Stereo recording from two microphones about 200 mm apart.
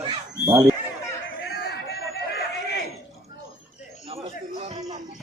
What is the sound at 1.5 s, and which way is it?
Chatter, 55° left (ahead or behind).